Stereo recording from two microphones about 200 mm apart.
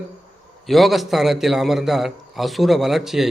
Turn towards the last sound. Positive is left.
turn(degrees=0)  # may be behind; listen again after turning